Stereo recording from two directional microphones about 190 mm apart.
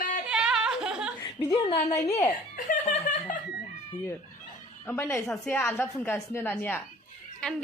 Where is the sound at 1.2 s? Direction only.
15° left (ahead or behind).